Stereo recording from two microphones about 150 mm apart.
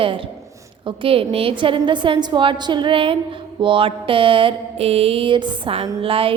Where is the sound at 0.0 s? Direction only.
35° right (ahead or behind).